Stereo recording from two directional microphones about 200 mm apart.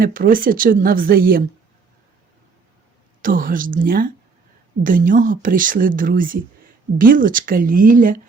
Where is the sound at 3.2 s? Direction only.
45° right (ahead or behind).